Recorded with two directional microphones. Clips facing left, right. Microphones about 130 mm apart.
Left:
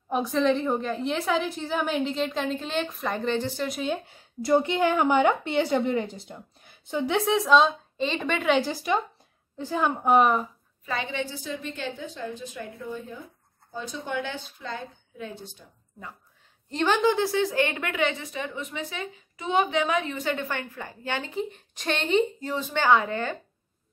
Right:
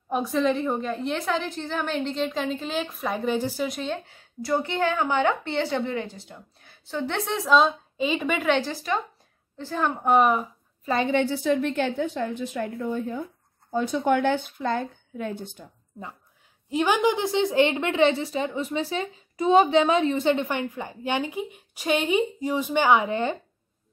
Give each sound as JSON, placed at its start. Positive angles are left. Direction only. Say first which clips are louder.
{"t": 0.1, "sound": "a woman's voice", "louder": "even", "side_deg": 0}
{"t": 4.4, "sound": "a woman's voice", "louder": "left 3 dB", "side_deg": 20}
{"t": 7.2, "sound": "a woman's voice", "louder": "even", "side_deg": 0}
{"t": 8.5, "sound": "a woman's voice", "louder": "left 1 dB", "side_deg": 10}
{"t": 11.1, "sound": "a woman's voice", "louder": "right 10 dB", "side_deg": -60}
{"t": 16.7, "sound": "a woman's voice", "louder": "right 1 dB", "side_deg": -10}